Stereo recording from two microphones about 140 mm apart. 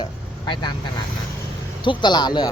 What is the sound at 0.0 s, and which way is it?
Vehicle, 35° left (ahead or behind).